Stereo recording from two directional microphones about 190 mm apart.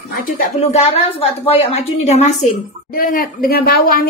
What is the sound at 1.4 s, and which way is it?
A woman's voice, 30° left (ahead or behind).